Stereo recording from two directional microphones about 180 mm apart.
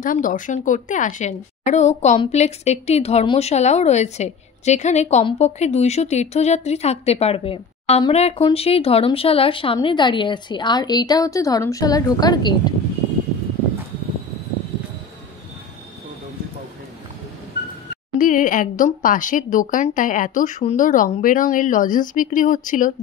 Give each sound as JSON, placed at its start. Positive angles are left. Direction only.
{"t": 0.0, "sound": "a woman's voice", "side_deg": 50}
{"t": 18.1, "sound": "speech", "side_deg": 45}